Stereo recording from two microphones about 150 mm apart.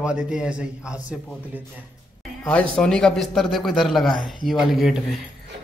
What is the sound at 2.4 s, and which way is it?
A man's voice, 5° left (ahead or behind).